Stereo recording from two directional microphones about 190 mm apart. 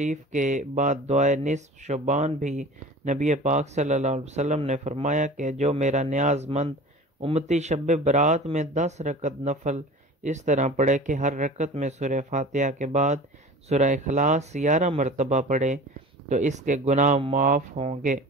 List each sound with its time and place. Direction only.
0.0 s speech: 40° right (ahead or behind)